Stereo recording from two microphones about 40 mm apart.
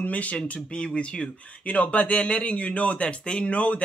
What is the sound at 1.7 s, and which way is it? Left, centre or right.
Speech, left.